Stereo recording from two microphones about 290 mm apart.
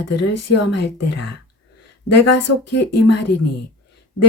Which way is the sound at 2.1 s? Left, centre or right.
Left.